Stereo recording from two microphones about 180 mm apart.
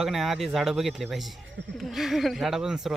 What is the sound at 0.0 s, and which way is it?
Speech, centre (ahead or behind).